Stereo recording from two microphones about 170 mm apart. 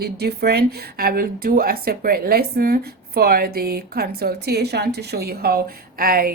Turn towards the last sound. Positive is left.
turn(degrees=-60)  # may be behind; listen again after turning